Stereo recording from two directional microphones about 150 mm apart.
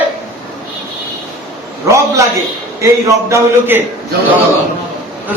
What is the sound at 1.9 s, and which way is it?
A man's voice, 20° right (ahead or behind).